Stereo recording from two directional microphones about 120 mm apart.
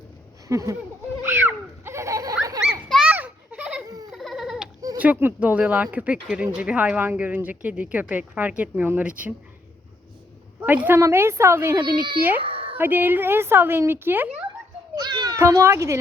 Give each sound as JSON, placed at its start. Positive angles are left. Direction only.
{"t": 0.4, "sound": "speech", "side_deg": -30}
{"t": 1.2, "sound": "a sound", "side_deg": -20}
{"t": 3.1, "sound": "baby laughter", "side_deg": -15}
{"t": 3.8, "sound": "baby laughter", "side_deg": -30}
{"t": 4.1, "sound": "goat", "side_deg": 0}
{"t": 4.9, "sound": "a woman's voice", "side_deg": -15}
{"t": 10.8, "sound": "speech", "side_deg": -20}
{"t": 11.8, "sound": "speech", "side_deg": -40}
{"t": 12.4, "sound": "a sound", "side_deg": -50}
{"t": 12.7, "sound": "a woman's voice", "side_deg": -15}
{"t": 14.9, "sound": "children playing", "side_deg": -35}
{"t": 15.4, "sound": "speech", "side_deg": -25}